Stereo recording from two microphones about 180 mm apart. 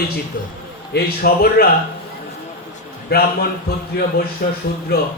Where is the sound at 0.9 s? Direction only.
60° left (ahead or behind).